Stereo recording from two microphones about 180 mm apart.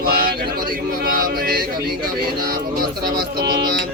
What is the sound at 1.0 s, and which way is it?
Chant, 55° right (ahead or behind).